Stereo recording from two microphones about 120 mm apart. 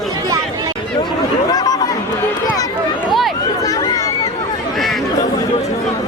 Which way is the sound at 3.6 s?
30° left (ahead or behind).